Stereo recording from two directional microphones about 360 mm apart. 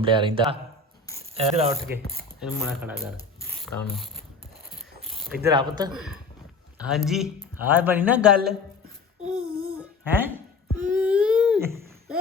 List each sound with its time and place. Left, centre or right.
0.0 s speech: centre
2.4 s speech: centre
3.6 s mechanisms: centre
5.0 s pulleys: centre
5.5 s speech: centre
6.9 s speech: centre
9.6 s a sound: centre